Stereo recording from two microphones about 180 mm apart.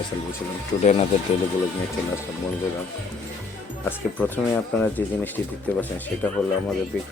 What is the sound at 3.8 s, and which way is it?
Speech, 10° left (ahead or behind).